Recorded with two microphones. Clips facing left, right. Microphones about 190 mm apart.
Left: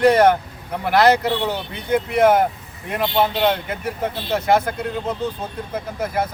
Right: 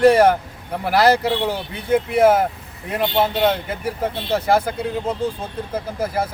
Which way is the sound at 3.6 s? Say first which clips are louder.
Right 1 dB; 10° right (ahead or behind).